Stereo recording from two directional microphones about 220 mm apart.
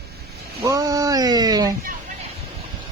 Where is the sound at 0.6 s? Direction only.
15° right (ahead or behind).